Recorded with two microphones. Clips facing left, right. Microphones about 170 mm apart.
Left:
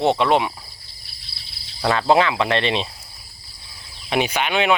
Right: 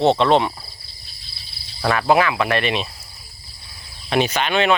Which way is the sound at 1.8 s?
25° left (ahead or behind).